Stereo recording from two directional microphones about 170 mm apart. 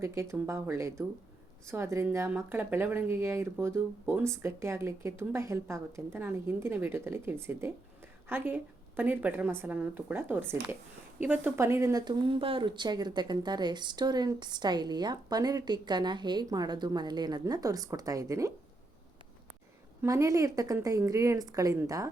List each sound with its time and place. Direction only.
0.0 s speech: 15° right (ahead or behind)
20.0 s speech: 20° right (ahead or behind)